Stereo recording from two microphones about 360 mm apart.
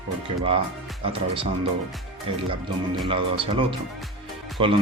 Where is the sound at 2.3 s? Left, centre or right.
Centre.